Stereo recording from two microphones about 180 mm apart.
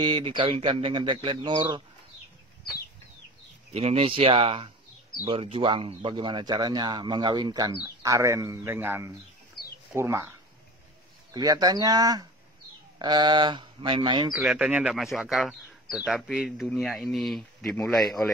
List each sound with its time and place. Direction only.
0.0 s speech: 30° right (ahead or behind)
3.7 s speech: 35° right (ahead or behind); by 10.3 s 15° right (ahead or behind)
11.3 s speech: 20° right (ahead or behind)
14.3 s speech: 5° right (ahead or behind)